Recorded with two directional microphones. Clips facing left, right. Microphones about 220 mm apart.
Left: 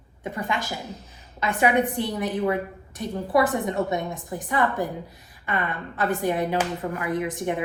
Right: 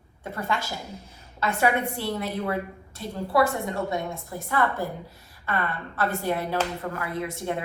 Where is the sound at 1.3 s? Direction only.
15° left (ahead or behind).